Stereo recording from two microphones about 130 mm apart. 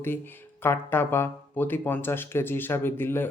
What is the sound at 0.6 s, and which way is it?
Speech, 15° left (ahead or behind).